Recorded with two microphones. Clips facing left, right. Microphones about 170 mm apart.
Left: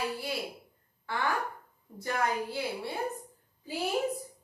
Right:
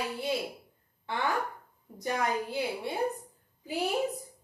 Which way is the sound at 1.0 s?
20° right (ahead or behind).